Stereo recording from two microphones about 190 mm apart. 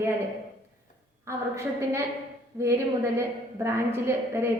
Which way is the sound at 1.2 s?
15° right (ahead or behind).